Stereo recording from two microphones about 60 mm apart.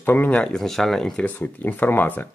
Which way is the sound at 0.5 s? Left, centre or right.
Centre.